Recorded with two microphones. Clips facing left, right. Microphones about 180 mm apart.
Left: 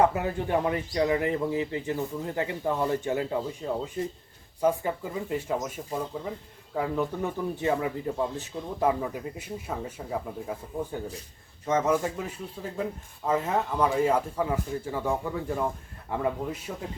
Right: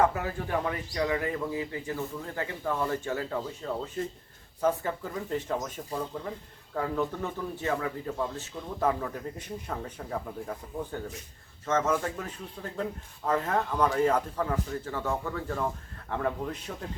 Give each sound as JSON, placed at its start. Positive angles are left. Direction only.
{"t": 0.0, "sound": "a man's voice", "side_deg": 20}